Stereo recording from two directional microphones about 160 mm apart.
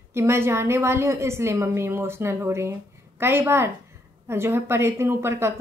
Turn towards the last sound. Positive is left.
turn(degrees=-15)  # may be behind; listen again after turning